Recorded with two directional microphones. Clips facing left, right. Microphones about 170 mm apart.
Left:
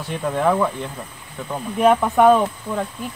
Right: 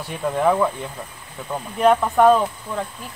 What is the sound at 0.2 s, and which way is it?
Speech, 5° right (ahead or behind).